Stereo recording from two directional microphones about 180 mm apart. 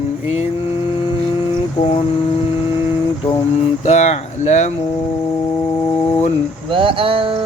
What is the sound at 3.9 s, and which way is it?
Speech, 40° left (ahead or behind).